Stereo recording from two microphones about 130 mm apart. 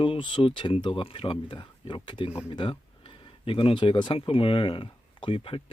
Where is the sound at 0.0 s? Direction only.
40° left (ahead or behind).